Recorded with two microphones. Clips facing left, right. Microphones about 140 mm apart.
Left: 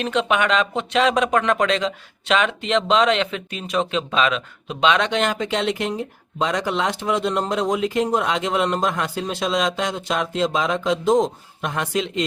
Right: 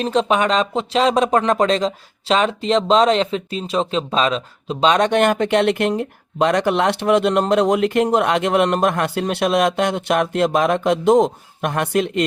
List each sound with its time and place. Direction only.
0.0 s speech: 35° right (ahead or behind); by 12.2 s 60° right (ahead or behind)